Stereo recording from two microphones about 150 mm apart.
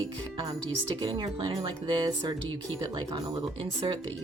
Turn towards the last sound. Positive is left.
turn(degrees=-30)  # may be behind; listen again after turning